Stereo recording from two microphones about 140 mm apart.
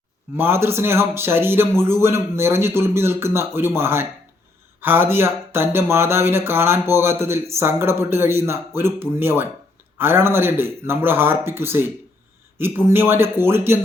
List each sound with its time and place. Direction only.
0.3 s speech: 15° right (ahead or behind)